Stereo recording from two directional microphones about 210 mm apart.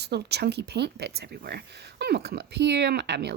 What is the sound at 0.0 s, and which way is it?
Speech, 50° right (ahead or behind).